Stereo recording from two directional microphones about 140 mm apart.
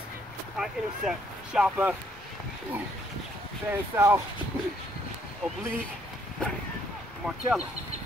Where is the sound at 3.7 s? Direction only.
20° right (ahead or behind).